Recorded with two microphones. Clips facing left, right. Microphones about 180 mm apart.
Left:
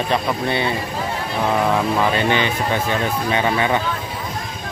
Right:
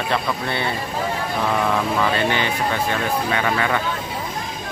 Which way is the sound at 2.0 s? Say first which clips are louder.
Left 2 dB; 20° left (ahead or behind).